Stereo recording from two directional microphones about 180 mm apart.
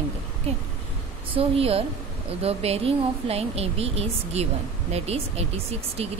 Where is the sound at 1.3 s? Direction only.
35° right (ahead or behind).